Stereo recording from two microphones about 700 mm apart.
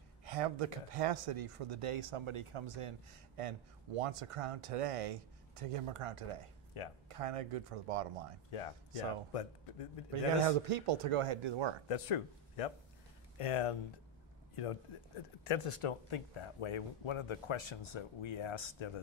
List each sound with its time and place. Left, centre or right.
0.2 s speech: right
6.7 s speech: left
7.1 s speech: right
8.5 s speech: left
10.4 s speech: right
11.9 s a man's voice: left